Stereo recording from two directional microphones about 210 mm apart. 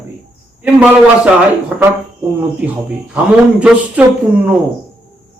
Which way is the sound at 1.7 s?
10° right (ahead or behind).